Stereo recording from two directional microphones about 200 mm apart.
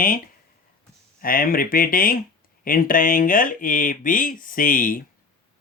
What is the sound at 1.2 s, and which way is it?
Speech, 45° left (ahead or behind).